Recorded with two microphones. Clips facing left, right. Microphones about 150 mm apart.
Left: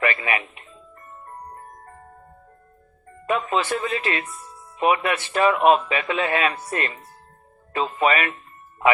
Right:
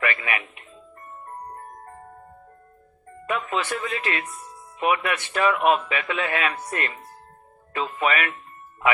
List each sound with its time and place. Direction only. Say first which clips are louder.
0.0 s speech: left 3 dB; 30° left (ahead or behind)
3.2 s a man's voice: left 4 dB; 30° left (ahead or behind)